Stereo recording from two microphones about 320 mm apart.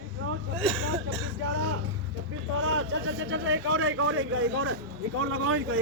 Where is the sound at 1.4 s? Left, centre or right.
Right.